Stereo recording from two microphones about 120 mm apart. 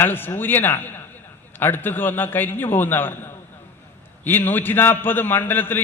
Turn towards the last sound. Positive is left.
turn(degrees=15)  # may be behind; listen again after turning